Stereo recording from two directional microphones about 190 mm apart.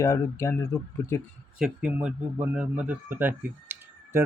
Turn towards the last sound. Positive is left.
turn(degrees=-10)  # may be behind; listen again after turning